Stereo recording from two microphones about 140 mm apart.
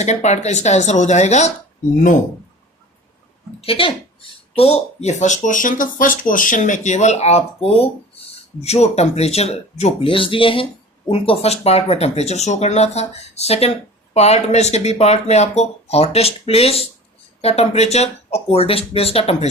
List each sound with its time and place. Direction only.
0.0 s speech: 55° left (ahead or behind)
3.6 s speech: 40° left (ahead or behind)